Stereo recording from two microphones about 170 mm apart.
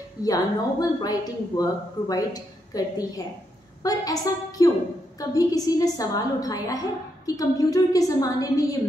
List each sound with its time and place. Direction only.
0.2 s speech: 20° left (ahead or behind)